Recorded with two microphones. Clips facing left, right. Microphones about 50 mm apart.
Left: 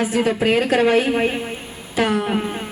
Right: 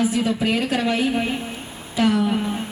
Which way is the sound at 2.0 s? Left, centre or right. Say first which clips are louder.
Even; left.